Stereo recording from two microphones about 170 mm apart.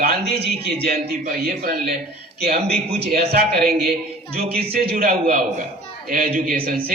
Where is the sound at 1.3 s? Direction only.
55° right (ahead or behind).